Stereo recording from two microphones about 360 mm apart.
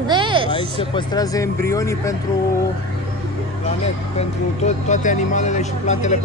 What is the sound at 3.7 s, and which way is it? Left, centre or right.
Speech, centre.